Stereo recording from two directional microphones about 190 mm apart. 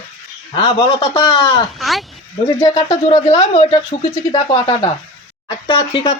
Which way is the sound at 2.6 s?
20° left (ahead or behind).